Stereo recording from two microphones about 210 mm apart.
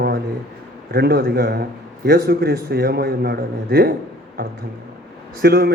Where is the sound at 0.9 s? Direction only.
50° right (ahead or behind).